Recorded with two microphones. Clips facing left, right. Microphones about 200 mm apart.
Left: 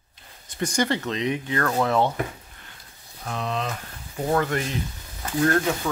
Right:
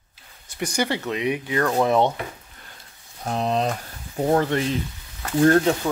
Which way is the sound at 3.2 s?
35° right (ahead or behind).